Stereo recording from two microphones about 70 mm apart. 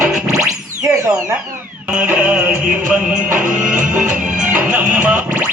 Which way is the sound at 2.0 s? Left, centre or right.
Right.